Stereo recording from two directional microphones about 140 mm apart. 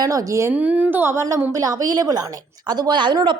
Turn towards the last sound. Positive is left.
turn(degrees=-35)  # may be behind; listen again after turning